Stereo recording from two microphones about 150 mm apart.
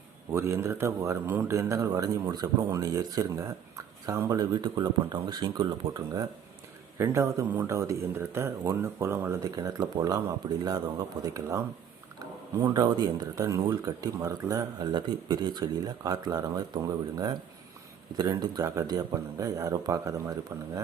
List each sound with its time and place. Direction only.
0.3 s speech: 20° right (ahead or behind)
12.6 s speech: 25° right (ahead or behind)